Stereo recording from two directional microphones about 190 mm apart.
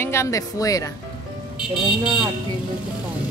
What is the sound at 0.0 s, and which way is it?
Speech, 15° left (ahead or behind).